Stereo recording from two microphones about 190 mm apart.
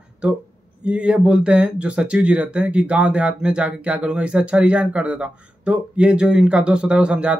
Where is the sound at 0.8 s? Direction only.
5° right (ahead or behind).